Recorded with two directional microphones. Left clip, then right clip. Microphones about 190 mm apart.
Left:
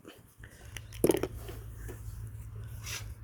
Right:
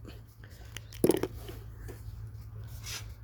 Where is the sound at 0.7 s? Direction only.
50° right (ahead or behind).